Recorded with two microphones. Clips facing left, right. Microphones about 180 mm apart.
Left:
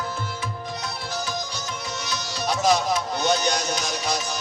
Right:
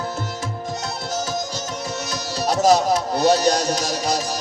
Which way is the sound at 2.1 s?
45° right (ahead or behind).